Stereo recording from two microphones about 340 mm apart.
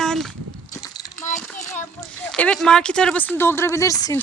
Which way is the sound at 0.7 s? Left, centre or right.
Centre.